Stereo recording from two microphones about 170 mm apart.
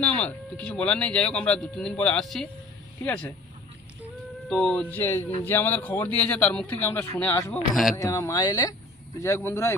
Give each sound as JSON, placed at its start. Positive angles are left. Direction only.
{"t": 0.0, "sound": "speech", "side_deg": 10}
{"t": 4.4, "sound": "speech", "side_deg": 5}